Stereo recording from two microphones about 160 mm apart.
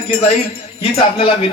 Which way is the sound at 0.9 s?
35° left (ahead or behind).